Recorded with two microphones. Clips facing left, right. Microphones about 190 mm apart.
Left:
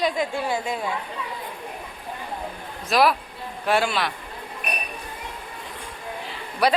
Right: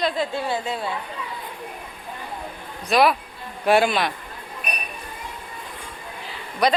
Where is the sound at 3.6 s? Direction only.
15° right (ahead or behind).